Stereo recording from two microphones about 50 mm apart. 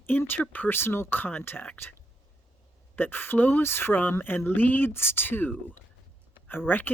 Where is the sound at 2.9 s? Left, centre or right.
Left.